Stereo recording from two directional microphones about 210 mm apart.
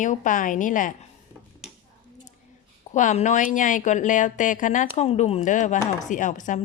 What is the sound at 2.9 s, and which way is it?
A woman's voice, 35° left (ahead or behind).